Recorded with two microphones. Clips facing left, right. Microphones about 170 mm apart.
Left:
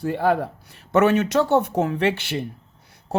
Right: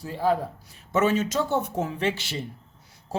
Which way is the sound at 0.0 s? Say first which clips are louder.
Left 4 dB; 65° left (ahead or behind).